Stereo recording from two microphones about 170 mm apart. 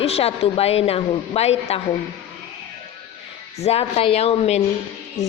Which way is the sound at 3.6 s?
35° left (ahead or behind).